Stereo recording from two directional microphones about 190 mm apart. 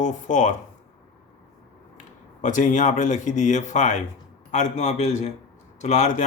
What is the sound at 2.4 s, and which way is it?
Music, 40° left (ahead or behind).